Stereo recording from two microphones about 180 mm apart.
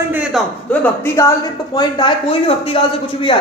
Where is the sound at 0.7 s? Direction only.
15° left (ahead or behind).